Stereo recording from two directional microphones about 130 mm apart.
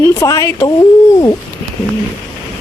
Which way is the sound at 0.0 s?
25° left (ahead or behind).